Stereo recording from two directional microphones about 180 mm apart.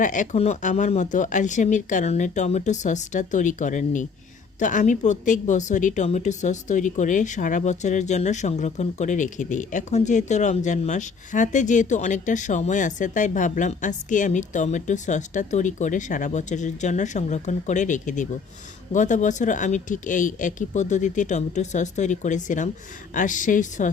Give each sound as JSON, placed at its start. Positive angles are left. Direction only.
{"t": 0.0, "sound": "a woman's voice", "side_deg": 45}